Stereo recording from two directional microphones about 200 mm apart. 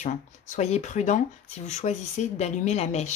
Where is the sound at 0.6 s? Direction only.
35° left (ahead or behind).